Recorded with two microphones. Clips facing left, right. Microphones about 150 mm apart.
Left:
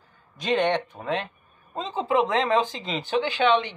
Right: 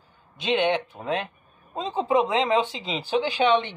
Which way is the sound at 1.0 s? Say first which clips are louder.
Right 1 dB; 15° right (ahead or behind).